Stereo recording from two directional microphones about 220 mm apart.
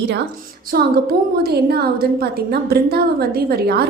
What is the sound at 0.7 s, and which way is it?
A woman's voice, 40° right (ahead or behind).